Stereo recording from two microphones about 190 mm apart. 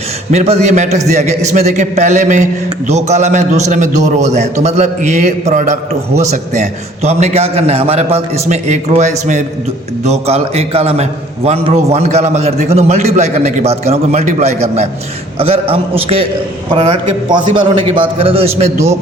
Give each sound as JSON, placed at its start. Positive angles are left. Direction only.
{"t": 0.3, "sound": "a man's voice", "side_deg": -35}